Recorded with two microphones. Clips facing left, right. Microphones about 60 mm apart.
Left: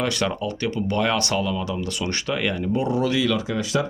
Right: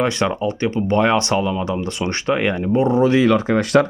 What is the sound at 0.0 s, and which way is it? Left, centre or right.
Speech, right.